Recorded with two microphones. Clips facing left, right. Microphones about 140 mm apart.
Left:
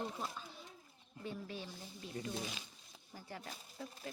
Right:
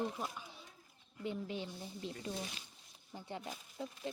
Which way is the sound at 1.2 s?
20° right (ahead or behind).